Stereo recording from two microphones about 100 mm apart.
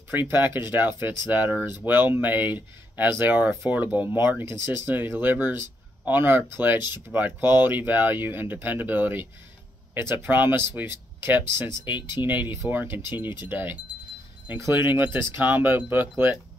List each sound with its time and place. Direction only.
0.3 s speech: 20° right (ahead or behind)
15.1 s speech: 25° right (ahead or behind)